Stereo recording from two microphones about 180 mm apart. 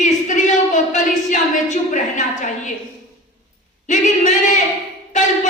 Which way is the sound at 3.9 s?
40° left (ahead or behind).